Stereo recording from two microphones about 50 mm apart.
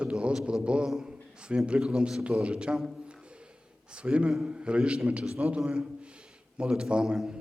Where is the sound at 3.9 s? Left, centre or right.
Right.